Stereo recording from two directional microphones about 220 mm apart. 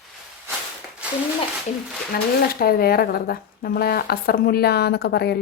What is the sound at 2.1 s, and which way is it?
A woman's voice, 45° left (ahead or behind).